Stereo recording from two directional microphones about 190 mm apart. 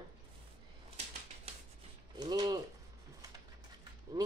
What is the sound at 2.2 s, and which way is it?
Speech, 20° right (ahead or behind).